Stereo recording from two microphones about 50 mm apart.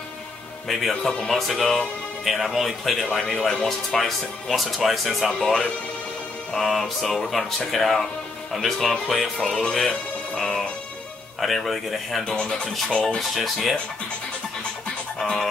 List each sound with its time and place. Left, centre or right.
0.7 s speech: centre
5.3 s speech: centre
6.5 s speech: centre
9.5 s speech: centre
9.8 s speech: centre
12.3 s speech: centre
13.3 s speech: centre
15.1 s music: centre